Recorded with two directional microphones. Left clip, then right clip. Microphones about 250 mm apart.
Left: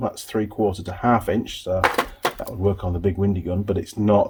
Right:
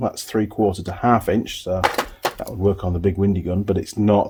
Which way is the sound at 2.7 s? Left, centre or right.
Right.